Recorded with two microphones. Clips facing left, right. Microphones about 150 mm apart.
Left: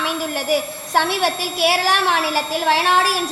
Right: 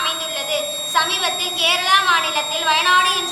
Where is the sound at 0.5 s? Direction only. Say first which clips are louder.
Left 2 dB; 40° left (ahead or behind).